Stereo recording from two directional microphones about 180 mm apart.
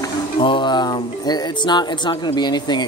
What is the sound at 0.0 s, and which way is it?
Speech, 25° left (ahead or behind).